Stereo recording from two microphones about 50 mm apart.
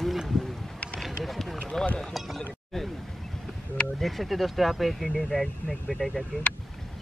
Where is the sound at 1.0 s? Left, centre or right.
Centre.